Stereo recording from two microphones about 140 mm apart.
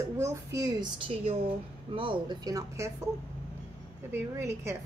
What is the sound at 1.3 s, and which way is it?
A woman's voice, 40° right (ahead or behind).